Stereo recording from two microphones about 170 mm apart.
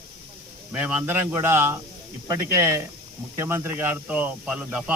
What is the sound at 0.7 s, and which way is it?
Speech, 10° right (ahead or behind).